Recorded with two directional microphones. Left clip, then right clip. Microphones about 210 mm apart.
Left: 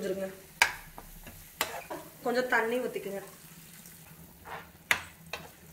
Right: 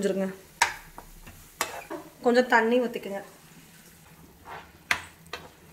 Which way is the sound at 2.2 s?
50° right (ahead or behind).